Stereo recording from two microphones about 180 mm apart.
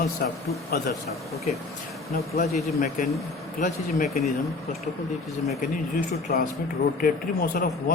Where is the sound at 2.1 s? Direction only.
55° left (ahead or behind).